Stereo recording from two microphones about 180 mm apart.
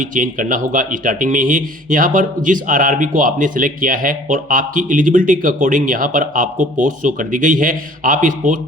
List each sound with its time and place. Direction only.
0.0 s speech: 45° right (ahead or behind)